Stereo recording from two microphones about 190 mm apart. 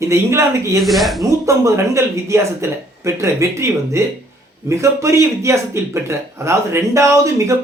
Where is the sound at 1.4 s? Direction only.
15° right (ahead or behind).